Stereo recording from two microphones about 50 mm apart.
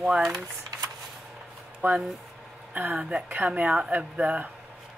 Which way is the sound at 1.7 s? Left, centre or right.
Right.